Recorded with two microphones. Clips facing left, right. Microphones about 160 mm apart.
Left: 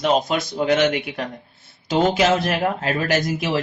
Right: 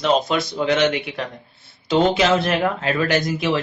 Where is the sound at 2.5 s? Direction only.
40° left (ahead or behind).